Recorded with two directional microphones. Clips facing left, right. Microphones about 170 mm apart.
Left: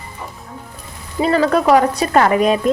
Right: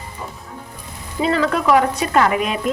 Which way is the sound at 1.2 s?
40° left (ahead or behind).